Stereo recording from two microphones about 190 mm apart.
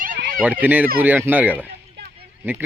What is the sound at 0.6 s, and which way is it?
Speech, 10° right (ahead or behind).